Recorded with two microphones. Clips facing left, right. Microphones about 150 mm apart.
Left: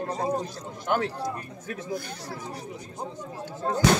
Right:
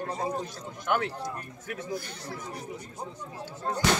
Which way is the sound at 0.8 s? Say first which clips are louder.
Left 2 dB; 30° left (ahead or behind).